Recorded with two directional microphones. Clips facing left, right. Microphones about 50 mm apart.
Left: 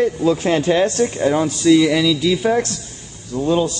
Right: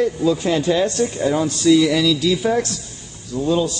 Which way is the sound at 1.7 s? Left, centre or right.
Left.